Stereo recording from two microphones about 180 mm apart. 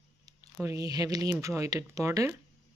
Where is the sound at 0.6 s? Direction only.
20° right (ahead or behind).